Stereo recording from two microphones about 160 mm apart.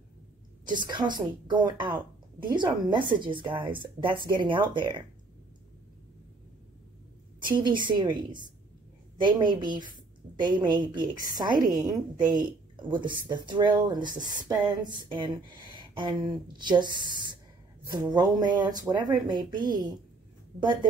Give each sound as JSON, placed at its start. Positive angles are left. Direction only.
{"t": 0.7, "sound": "a woman's voice", "side_deg": -25}
{"t": 7.4, "sound": "a woman's voice", "side_deg": -30}